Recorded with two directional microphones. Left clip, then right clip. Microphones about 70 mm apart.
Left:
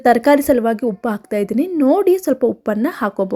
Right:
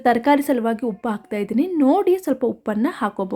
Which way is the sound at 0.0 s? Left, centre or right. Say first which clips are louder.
Left 5 dB; left.